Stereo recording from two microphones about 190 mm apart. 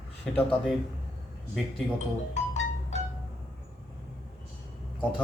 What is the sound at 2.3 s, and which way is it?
Music, 40° left (ahead or behind).